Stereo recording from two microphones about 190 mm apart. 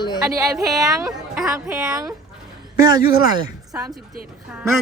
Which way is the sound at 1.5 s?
20° right (ahead or behind).